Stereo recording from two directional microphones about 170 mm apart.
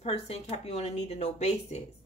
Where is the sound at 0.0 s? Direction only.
40° left (ahead or behind).